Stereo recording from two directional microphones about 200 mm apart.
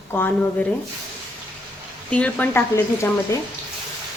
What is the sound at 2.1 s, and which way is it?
A woman's voice, 5° left (ahead or behind).